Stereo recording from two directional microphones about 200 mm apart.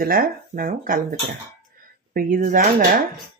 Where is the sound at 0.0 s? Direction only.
45° right (ahead or behind).